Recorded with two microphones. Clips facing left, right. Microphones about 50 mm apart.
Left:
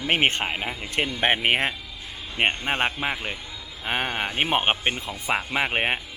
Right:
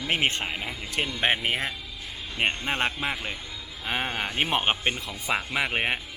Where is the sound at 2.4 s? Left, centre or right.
Left.